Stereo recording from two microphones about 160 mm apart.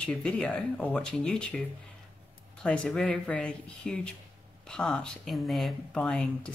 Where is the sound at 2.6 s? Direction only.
5° left (ahead or behind).